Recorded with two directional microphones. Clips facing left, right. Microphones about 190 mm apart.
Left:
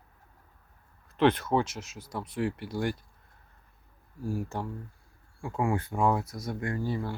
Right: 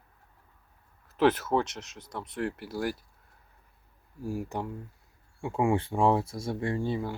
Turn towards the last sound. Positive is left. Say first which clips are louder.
# right 2 dB
turn(degrees=-20)  # may be behind; listen again after turning